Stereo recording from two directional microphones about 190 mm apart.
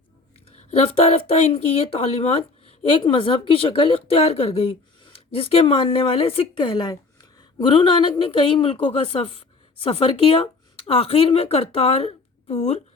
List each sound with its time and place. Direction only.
0.4 s speech: 35° left (ahead or behind)